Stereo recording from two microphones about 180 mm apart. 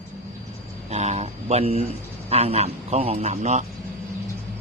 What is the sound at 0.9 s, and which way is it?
A man's voice, 40° right (ahead or behind).